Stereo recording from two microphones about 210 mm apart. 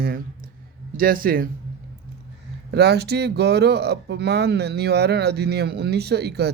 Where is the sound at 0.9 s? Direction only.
40° right (ahead or behind).